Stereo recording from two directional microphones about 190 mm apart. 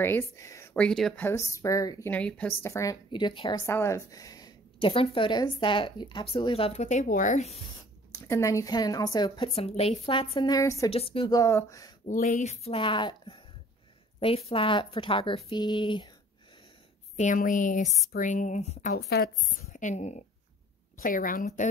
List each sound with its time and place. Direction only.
0.0 s speech: 10° left (ahead or behind)
0.7 s speech: 5° left (ahead or behind); by 7.6 s 35° left (ahead or behind)
8.1 s speech: 15° left (ahead or behind)
10.9 s speech: 30° left (ahead or behind)
12.1 s speech: 40° left (ahead or behind)
17.2 s a woman's voice: 40° left (ahead or behind)
18.9 s a woman's voice: 55° left (ahead or behind)